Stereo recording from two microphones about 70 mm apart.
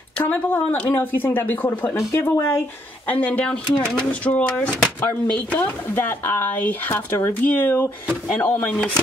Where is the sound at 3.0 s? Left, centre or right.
Left.